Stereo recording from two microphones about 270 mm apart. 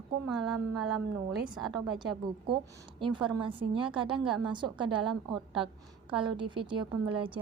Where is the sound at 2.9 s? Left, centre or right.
Centre.